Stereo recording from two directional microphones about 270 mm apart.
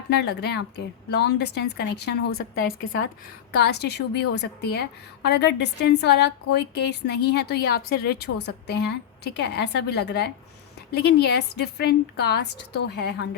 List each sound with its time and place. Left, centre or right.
0.2 s a woman's voice: left